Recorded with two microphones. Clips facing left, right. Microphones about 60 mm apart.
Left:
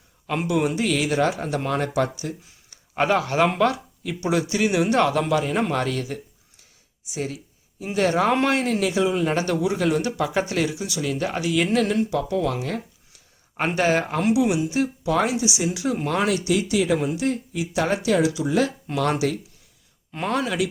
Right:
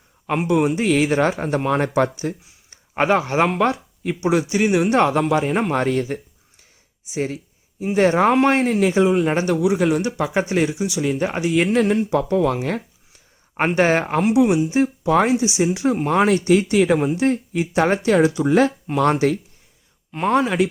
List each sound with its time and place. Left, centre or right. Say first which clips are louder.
0.4 s speech: right 4 dB; right
2.6 s a man's voice: right 3 dB; right
7.0 s a sound: right 5 dB; right
7.9 s speech: right 4 dB; right
12.1 s a sound: right 5 dB; right
13.7 s speech: right 3 dB; right